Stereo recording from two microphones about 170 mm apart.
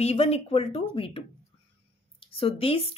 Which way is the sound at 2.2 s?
35° left (ahead or behind).